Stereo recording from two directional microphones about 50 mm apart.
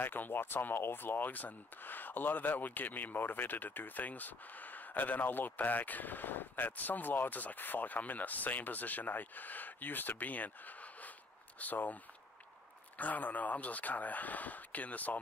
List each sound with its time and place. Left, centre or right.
0.0 s speech: left